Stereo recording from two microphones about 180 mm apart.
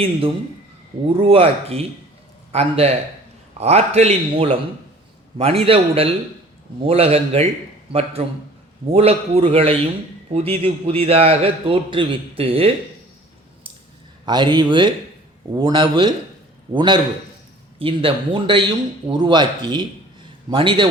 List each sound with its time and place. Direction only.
0.0 s a man's voice: 30° right (ahead or behind)
14.3 s speech: 25° right (ahead or behind)